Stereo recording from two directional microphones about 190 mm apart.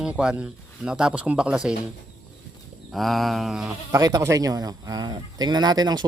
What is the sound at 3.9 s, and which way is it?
Speech, 20° right (ahead or behind).